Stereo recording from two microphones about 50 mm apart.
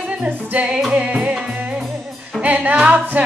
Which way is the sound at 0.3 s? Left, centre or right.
Right.